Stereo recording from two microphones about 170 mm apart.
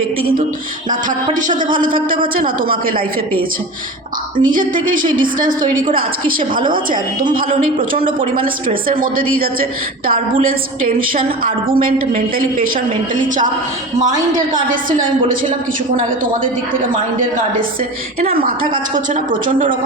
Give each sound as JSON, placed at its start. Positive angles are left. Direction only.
{"t": 0.9, "sound": "a woman's voice", "side_deg": -50}
{"t": 4.4, "sound": "speech", "side_deg": -55}
{"t": 6.5, "sound": "a woman's voice", "side_deg": -55}
{"t": 7.9, "sound": "speech", "side_deg": -30}
{"t": 8.4, "sound": "a woman's voice", "side_deg": -55}
{"t": 14.0, "sound": "a woman's voice", "side_deg": -20}
{"t": 14.7, "sound": "speech", "side_deg": -50}
{"t": 18.3, "sound": "a woman's voice", "side_deg": -60}